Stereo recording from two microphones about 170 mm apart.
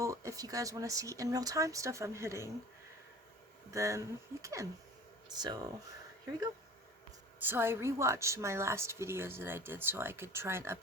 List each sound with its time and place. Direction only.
0.0 s speech: 20° right (ahead or behind)
3.7 s speech: 20° right (ahead or behind)
7.3 s a woman's voice: 10° right (ahead or behind)